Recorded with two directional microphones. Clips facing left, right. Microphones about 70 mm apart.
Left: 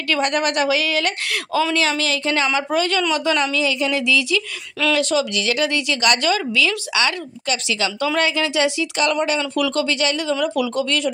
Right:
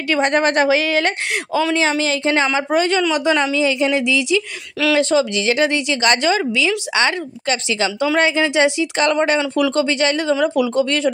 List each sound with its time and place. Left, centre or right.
0.1 s a woman's voice: right